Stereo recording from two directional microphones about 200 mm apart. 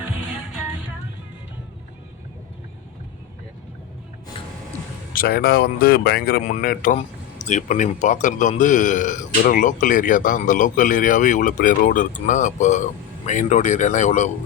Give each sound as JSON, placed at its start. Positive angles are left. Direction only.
{"t": 5.1, "sound": "speech", "side_deg": 50}
{"t": 6.4, "sound": "speech", "side_deg": 40}